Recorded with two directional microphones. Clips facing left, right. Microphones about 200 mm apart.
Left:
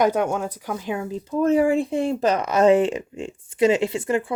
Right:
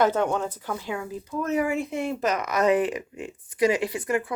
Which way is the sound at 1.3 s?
30° left (ahead or behind).